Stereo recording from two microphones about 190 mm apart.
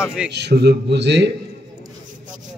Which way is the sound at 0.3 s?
60° right (ahead or behind).